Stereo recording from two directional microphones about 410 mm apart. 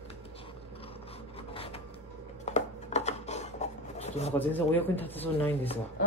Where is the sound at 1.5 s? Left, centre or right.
Centre.